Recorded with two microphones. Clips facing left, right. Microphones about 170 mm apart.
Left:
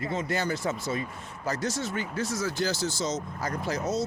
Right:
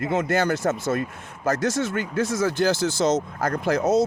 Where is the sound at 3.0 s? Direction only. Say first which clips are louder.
Right 11 dB; 70° right (ahead or behind).